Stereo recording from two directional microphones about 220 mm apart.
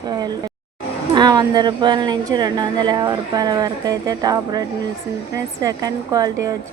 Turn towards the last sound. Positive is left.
turn(degrees=-15)  # may be behind; listen again after turning